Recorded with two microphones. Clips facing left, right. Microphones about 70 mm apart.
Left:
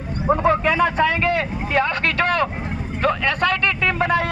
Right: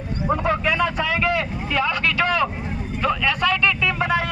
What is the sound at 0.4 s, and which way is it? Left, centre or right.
Vehicle, left.